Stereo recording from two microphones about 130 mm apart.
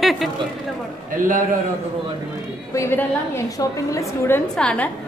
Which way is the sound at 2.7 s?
20° left (ahead or behind).